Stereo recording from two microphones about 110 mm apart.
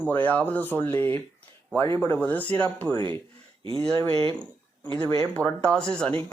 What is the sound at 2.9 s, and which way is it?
Speech, 50° right (ahead or behind).